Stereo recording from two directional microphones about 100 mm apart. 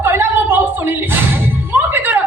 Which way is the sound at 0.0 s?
20° right (ahead or behind).